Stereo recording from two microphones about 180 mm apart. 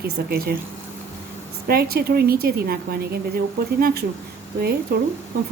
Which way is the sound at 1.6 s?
60° right (ahead or behind).